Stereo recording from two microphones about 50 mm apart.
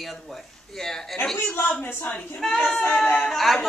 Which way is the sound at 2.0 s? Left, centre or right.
Left.